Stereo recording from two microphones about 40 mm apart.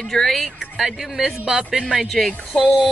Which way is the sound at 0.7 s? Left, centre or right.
Centre.